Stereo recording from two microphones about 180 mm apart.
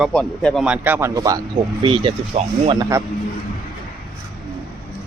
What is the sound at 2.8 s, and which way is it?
Speech, 15° right (ahead or behind).